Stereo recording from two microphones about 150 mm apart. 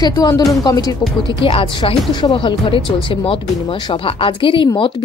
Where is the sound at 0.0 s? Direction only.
25° left (ahead or behind).